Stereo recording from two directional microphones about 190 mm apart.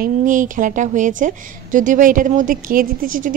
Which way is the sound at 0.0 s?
45° right (ahead or behind).